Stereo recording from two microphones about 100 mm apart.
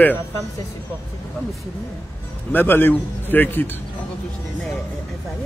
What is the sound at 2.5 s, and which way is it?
A man's voice, 20° left (ahead or behind).